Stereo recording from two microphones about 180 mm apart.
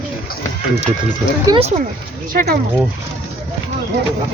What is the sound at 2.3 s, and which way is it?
Speech, 55° right (ahead or behind).